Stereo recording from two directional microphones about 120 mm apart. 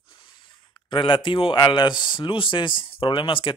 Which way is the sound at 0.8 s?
45° left (ahead or behind).